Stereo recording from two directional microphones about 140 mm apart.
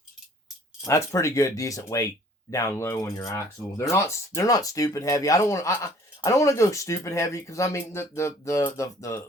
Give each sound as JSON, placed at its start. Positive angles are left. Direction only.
{"t": 0.9, "sound": "speech", "side_deg": 20}